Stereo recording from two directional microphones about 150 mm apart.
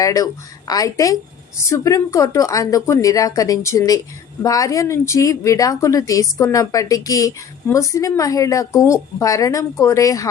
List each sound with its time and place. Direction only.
0.0 s speech: 25° left (ahead or behind)